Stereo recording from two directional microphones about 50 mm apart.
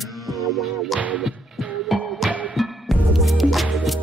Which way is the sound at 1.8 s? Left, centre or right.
Centre.